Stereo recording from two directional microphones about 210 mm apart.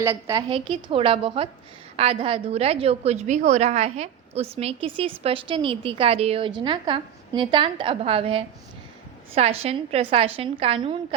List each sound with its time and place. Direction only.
0.0 s a woman's voice: 15° right (ahead or behind)